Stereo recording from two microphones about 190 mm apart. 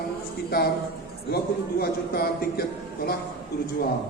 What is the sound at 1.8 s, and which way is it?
A man's voice, 55° left (ahead or behind).